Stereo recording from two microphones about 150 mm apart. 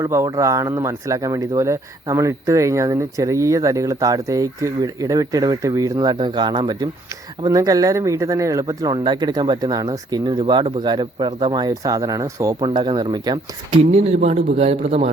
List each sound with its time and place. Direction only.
0.0 s speech: 20° right (ahead or behind)
13.9 s a man's voice: 45° right (ahead or behind)